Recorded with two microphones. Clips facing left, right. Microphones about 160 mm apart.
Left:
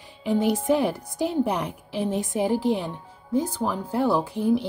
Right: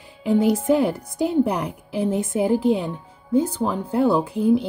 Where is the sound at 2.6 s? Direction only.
20° right (ahead or behind).